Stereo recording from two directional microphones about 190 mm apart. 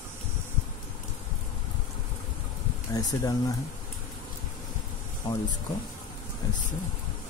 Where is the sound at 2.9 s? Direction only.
20° left (ahead or behind).